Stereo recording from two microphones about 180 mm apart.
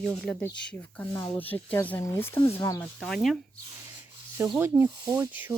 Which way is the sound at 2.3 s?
25° left (ahead or behind).